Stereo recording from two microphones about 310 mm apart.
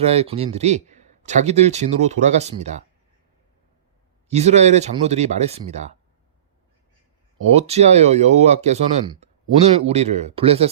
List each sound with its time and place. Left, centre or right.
0.0 s speech: centre
4.3 s speech: right
7.5 s speech: right